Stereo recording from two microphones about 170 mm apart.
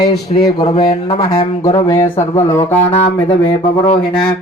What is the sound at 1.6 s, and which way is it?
Speech, 15° left (ahead or behind).